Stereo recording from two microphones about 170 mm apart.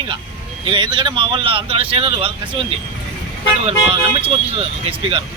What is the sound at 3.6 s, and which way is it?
Speech, 35° right (ahead or behind).